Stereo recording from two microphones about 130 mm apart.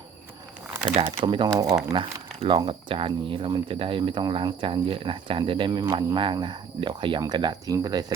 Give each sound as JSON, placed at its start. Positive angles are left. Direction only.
{"t": 1.2, "sound": "speech", "side_deg": -35}
{"t": 1.9, "sound": "speech", "side_deg": -45}